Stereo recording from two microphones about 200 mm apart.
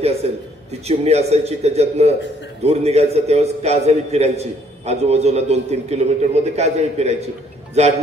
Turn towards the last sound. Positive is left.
turn(degrees=-30)  # may be behind; listen again after turning